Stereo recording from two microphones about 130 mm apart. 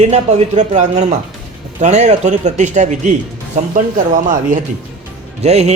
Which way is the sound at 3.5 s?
80° right.